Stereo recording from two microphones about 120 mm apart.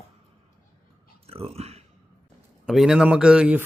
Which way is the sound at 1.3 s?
55° right (ahead or behind).